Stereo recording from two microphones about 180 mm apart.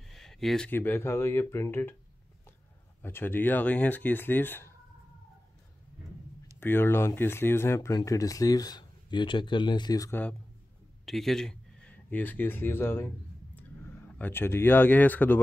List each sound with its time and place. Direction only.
0.0 s speech: centre (ahead or behind)
3.0 s speech: 10° left (ahead or behind)
6.6 s speech: 10° left (ahead or behind)
11.1 s speech: centre (ahead or behind)